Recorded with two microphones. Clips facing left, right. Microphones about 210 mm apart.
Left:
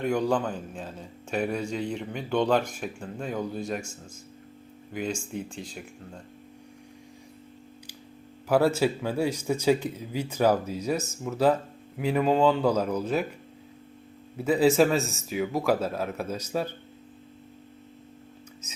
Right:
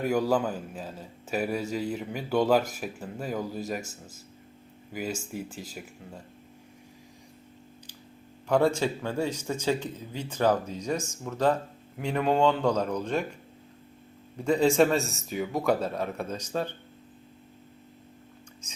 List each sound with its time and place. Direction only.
0.0 s a man's voice: 5° right (ahead or behind)
8.4 s a man's voice: 5° left (ahead or behind)
14.3 s a man's voice: 5° left (ahead or behind)